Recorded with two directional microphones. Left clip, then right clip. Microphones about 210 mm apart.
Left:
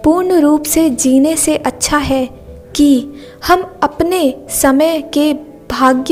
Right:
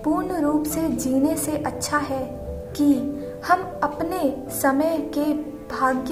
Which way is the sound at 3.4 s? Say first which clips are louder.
Left 9 dB; 35° left (ahead or behind).